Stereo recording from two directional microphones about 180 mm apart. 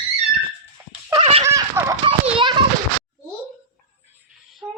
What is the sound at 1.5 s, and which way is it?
Giggle, 15° right (ahead or behind).